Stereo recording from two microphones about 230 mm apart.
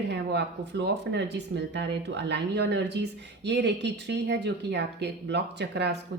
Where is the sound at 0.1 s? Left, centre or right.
Right.